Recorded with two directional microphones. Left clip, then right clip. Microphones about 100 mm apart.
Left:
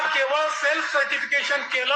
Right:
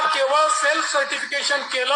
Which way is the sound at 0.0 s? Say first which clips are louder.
Right 4 dB; 45° right (ahead or behind).